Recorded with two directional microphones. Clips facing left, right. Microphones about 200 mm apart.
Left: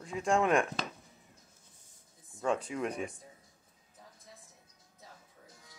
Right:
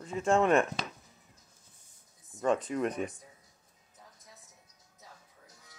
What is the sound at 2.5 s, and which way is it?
Speech, 10° left (ahead or behind).